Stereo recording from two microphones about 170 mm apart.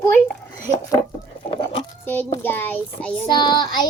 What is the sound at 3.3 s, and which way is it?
Child singing, 25° left (ahead or behind).